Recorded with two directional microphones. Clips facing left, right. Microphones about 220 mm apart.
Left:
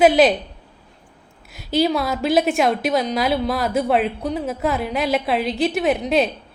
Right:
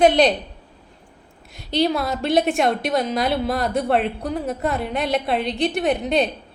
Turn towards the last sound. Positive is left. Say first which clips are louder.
# left 1 dB
turn(degrees=0)  # may be behind; listen again after turning